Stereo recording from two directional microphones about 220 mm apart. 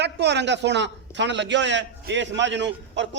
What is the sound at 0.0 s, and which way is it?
A man's voice, 50° right (ahead or behind).